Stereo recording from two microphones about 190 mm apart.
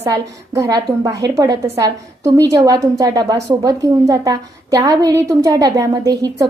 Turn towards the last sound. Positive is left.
turn(degrees=-20)  # may be behind; listen again after turning